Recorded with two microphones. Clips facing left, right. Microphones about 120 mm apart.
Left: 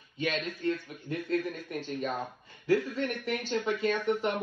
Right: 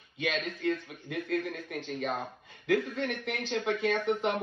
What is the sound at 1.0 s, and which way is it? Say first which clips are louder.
Speech: left 1 dB; 60° right (ahead or behind).